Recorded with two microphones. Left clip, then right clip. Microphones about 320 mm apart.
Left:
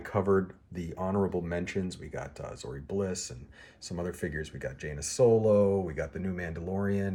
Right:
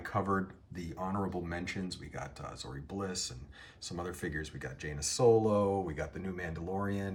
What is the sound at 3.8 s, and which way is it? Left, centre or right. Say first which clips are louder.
Speech: left 4 dB; centre.